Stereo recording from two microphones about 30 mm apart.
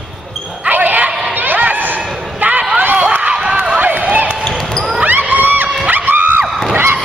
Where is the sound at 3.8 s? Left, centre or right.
Right.